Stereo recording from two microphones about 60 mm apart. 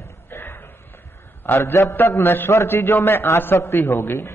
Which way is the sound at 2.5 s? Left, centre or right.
Left.